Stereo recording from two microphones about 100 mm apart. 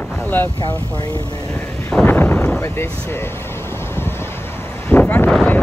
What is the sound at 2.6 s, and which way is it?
Speech, 25° left (ahead or behind).